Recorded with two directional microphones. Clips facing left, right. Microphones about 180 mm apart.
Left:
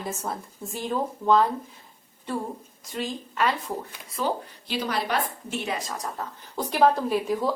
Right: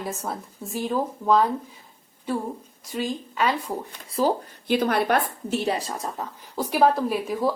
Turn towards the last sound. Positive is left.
turn(degrees=0)  # may be behind; listen again after turning